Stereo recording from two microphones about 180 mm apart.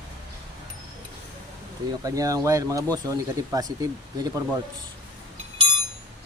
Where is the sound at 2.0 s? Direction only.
20° right (ahead or behind).